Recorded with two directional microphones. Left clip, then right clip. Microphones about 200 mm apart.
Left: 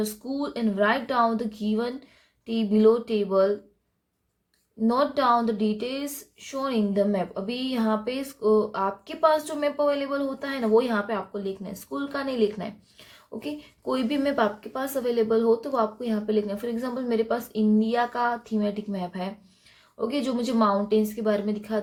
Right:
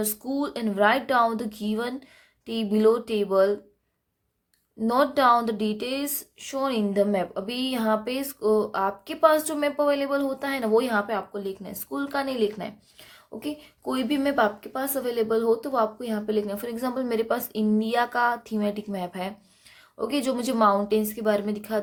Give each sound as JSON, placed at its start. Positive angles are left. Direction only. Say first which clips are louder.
{"t": 0.0, "sound": "speech", "louder": "right 1 dB", "side_deg": -35}
{"t": 4.9, "sound": "speech", "louder": "right 2 dB", "side_deg": -35}